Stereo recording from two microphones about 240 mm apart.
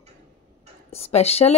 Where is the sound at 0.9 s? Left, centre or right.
Left.